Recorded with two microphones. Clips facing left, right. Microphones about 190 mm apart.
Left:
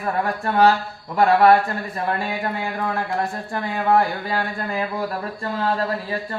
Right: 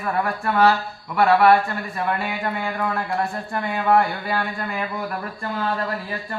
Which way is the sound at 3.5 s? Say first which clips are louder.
Even; 30° left (ahead or behind).